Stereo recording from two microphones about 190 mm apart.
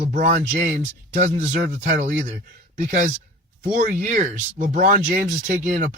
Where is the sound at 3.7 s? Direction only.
45° right (ahead or behind).